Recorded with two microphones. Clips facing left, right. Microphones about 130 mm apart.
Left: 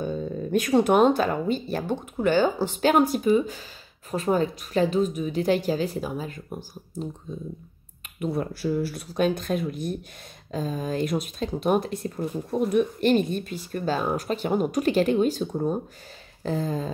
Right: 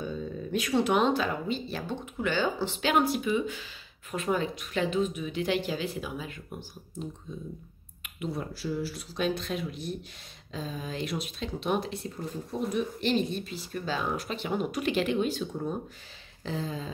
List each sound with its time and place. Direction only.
0.0 s speech: 45° left (ahead or behind)
8.2 s speech: 55° left (ahead or behind)